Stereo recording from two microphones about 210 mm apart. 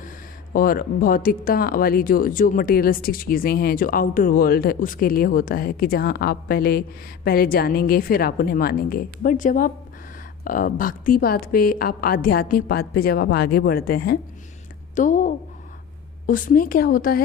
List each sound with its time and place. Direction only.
0.5 s a woman's voice: 45° left (ahead or behind)